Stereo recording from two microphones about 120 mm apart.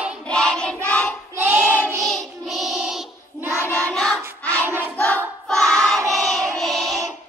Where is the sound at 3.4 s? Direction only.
20° right (ahead or behind).